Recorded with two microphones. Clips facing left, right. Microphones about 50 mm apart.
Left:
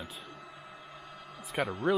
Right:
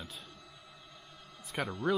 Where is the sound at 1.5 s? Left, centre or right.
Centre.